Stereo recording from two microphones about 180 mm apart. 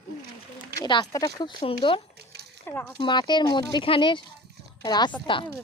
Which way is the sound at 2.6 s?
10° left (ahead or behind).